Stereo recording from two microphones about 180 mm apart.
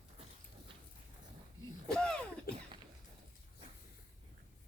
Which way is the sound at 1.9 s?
5° left (ahead or behind).